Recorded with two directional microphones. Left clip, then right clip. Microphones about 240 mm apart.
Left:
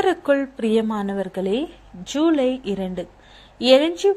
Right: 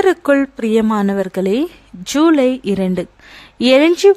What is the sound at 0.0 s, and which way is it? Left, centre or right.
Speech, right.